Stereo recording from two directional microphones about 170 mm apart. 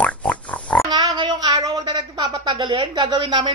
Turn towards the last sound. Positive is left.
turn(degrees=-25)  # may be behind; listen again after turning